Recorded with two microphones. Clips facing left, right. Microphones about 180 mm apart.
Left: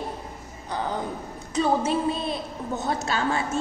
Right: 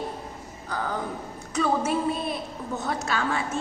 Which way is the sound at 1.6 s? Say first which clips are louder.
Left 1 dB; 25° left (ahead or behind).